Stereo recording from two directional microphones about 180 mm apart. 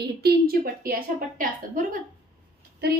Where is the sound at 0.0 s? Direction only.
60° right (ahead or behind).